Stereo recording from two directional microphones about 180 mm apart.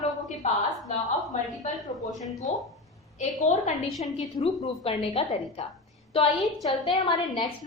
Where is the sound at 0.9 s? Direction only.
40° left (ahead or behind).